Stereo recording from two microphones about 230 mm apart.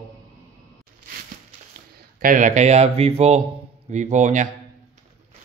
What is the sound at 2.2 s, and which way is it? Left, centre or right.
A man's voice, right.